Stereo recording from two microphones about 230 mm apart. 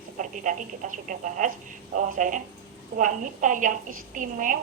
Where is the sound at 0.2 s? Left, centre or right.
Right.